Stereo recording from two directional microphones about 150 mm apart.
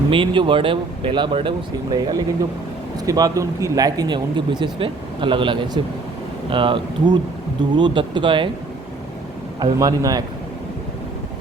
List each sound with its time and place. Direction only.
0.1 s speech: 35° right (ahead or behind)
9.7 s speech: 25° right (ahead or behind)